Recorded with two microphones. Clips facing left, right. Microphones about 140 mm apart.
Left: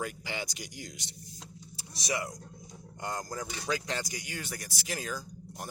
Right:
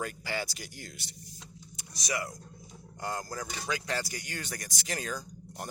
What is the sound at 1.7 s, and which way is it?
Speech, 25° left (ahead or behind).